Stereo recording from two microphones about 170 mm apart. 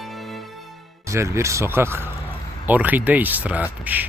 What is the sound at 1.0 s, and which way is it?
Speech, 15° right (ahead or behind).